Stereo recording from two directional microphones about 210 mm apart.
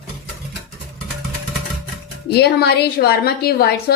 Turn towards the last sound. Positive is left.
turn(degrees=50)  # may be behind; listen again after turning